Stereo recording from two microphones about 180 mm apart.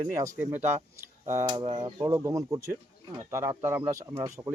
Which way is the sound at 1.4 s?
25° right (ahead or behind).